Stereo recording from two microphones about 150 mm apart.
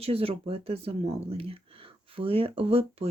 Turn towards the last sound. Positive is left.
turn(degrees=-40)  # may be behind; listen again after turning